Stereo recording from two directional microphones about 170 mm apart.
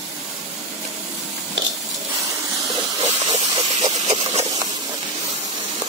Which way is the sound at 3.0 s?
40° right (ahead or behind).